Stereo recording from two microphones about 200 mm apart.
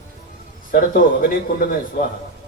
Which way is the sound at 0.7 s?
45° left (ahead or behind).